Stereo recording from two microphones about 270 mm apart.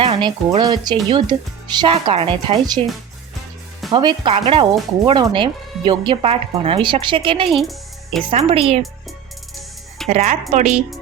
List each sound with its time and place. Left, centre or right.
0.0 s speech: centre
3.9 s speech: centre
7.5 s speech: centre
8.3 s speech: right
10.1 s speech: right